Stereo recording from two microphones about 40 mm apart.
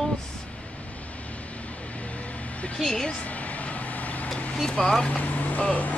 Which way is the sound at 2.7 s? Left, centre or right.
Centre.